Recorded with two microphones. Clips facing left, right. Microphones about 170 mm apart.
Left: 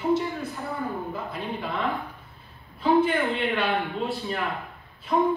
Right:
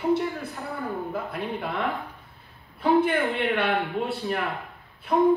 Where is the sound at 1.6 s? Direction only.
Centre (ahead or behind).